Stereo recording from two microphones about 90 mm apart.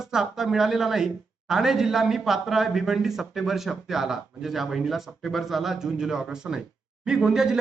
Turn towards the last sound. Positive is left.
turn(degrees=-5)  # may be behind; listen again after turning